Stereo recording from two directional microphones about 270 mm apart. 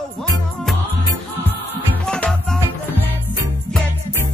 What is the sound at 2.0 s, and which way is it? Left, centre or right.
Music, centre.